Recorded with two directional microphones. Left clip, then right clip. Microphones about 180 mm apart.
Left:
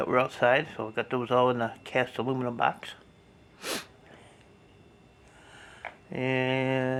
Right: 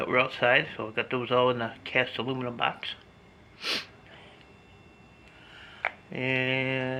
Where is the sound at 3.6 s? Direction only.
50° left (ahead or behind).